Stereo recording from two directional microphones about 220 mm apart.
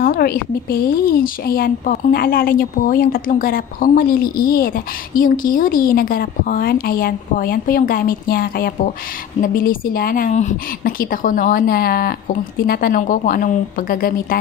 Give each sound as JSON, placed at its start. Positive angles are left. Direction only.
{"t": 0.0, "sound": "speech", "side_deg": 45}